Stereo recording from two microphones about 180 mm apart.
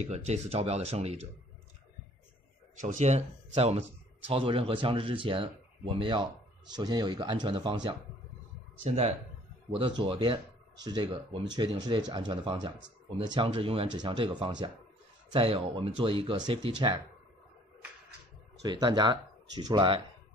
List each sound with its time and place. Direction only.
0.0 s speech: 35° right (ahead or behind)
2.8 s speech: 40° right (ahead or behind); by 7.9 s 25° right (ahead or behind)
9.7 s speech: 25° right (ahead or behind)
18.6 s speech: 25° right (ahead or behind)